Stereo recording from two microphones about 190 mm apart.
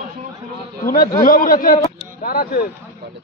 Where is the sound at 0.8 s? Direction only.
50° left (ahead or behind).